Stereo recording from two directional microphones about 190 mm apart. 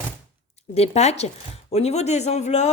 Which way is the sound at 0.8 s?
35° left (ahead or behind).